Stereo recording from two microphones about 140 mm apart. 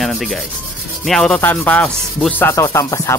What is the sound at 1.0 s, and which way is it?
Sanding, 5° left (ahead or behind).